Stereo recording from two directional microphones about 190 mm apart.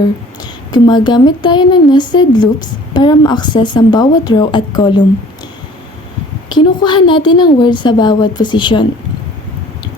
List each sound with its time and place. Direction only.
0.7 s a woman's voice: 20° left (ahead or behind)
6.5 s a woman's voice: 25° left (ahead or behind)